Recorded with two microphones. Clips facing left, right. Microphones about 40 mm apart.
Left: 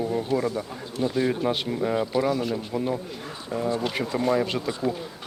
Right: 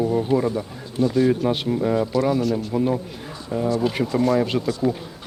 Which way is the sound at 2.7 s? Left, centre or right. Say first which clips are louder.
Right 5 dB; centre.